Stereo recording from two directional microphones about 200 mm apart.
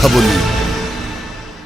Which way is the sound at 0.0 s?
Centre (ahead or behind).